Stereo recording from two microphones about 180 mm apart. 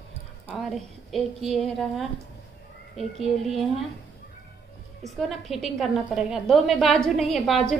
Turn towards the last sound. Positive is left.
turn(degrees=0)  # may be behind; listen again after turning